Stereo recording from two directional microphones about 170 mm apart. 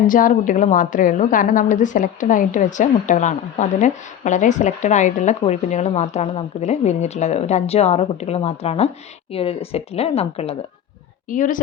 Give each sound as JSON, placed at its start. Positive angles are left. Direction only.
{"t": 0.1, "sound": "a woman's voice", "side_deg": 50}
{"t": 11.3, "sound": "a woman's voice", "side_deg": 50}